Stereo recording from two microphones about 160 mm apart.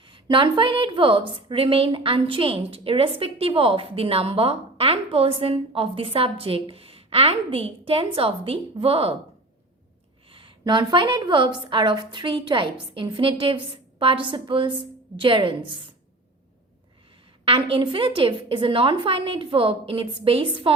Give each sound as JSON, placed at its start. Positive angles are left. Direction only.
{"t": 0.0, "sound": "a woman's voice", "side_deg": -30}
{"t": 10.3, "sound": "a woman's voice", "side_deg": -30}
{"t": 17.4, "sound": "a woman's voice", "side_deg": -35}